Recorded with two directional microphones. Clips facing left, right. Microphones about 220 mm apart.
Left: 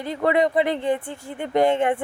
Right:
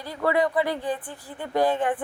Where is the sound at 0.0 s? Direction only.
20° left (ahead or behind).